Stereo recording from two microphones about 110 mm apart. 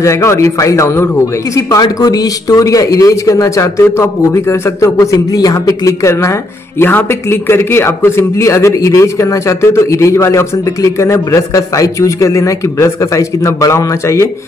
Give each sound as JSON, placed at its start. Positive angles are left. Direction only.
{"t": 0.0, "sound": "a man's voice", "side_deg": 25}